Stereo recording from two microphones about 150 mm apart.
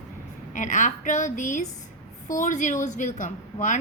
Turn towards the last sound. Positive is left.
turn(degrees=55)  # may be behind; listen again after turning